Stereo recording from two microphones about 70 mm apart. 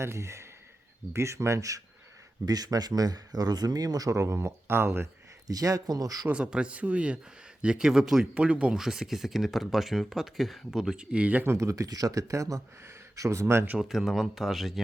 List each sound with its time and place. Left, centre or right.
0.0 s speech: right
2.5 s speech: right
5.5 s speech: right
6.2 s speech: centre
11.4 s speech: right
11.9 s speech: right
13.7 s speech: centre